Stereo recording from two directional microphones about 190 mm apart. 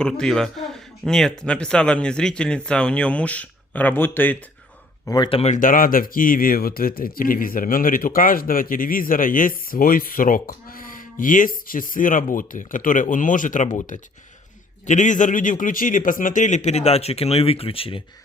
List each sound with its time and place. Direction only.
0.0 s speech: 5° left (ahead or behind)
5.0 s a man's voice: 20° left (ahead or behind)